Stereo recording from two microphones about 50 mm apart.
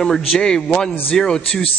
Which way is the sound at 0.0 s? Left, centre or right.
Centre.